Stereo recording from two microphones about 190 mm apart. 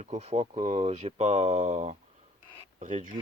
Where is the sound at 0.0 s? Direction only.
35° right (ahead or behind).